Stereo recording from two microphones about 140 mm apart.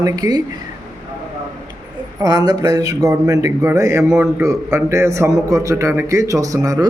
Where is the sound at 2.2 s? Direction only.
25° right (ahead or behind).